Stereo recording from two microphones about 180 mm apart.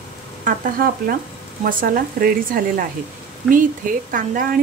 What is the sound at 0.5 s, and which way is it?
A woman's voice, 50° right (ahead or behind).